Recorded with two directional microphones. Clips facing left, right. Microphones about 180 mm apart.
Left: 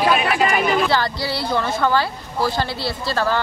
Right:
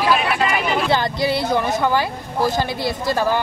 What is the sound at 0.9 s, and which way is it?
Speech, 20° right (ahead or behind).